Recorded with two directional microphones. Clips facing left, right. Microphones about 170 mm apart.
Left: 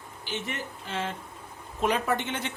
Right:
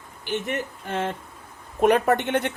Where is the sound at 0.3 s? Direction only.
60° right (ahead or behind).